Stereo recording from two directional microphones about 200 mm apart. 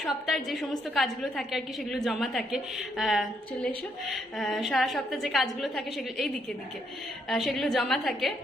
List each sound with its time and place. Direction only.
0.0 s a woman's voice: centre (ahead or behind)